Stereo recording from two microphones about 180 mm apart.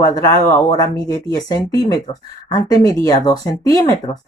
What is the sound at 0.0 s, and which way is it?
Speech, 20° left (ahead or behind).